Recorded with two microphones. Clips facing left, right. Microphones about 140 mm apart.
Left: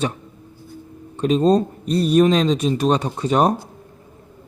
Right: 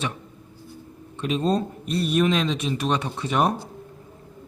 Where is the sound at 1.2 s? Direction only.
35° left (ahead or behind).